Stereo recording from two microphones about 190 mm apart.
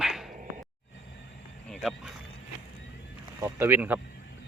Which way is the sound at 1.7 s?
Centre (ahead or behind).